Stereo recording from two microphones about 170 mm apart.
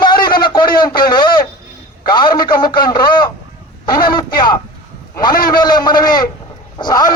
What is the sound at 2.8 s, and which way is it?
A man's voice, 25° left (ahead or behind).